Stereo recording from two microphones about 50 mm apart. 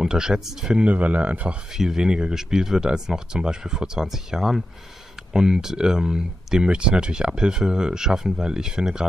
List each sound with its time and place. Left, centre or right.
0.0 s speech: centre
0.8 s speech: right
1.7 s speech: centre